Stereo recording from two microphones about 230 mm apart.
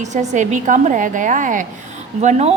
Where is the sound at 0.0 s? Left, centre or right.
Right.